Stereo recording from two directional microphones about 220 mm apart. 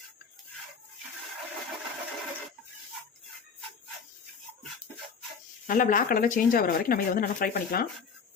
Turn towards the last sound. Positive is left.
turn(degrees=40)  # may be behind; listen again after turning